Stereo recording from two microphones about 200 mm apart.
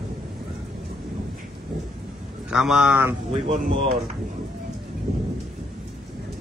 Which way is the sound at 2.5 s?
5° right (ahead or behind).